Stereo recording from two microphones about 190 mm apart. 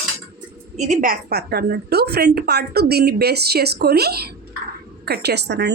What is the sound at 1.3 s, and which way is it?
A woman's voice, 60° right (ahead or behind).